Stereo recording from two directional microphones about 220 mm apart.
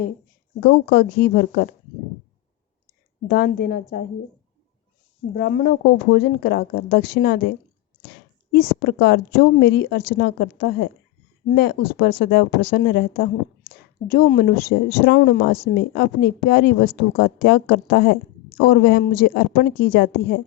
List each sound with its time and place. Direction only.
0.6 s speech: 45° left (ahead or behind)
3.2 s speech: 50° left (ahead or behind)
5.3 s speech: 45° left (ahead or behind)
8.5 s a woman's voice: 50° left (ahead or behind)